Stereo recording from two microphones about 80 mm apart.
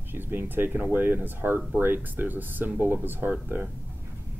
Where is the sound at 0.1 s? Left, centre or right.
Right.